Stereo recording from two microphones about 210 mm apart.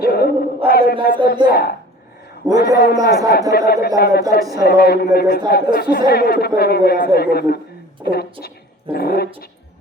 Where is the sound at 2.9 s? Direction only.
15° right (ahead or behind).